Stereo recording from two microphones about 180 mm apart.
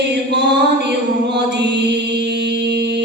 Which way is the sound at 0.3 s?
70° right (ahead or behind).